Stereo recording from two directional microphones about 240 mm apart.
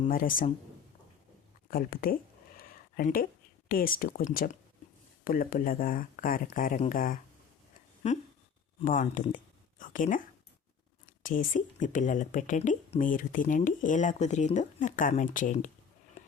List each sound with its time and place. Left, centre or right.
0.1 s speech: left
1.7 s speech: left
2.6 s a sound: left
3.7 s speech: left
8.8 s speech: left
11.2 s speech: left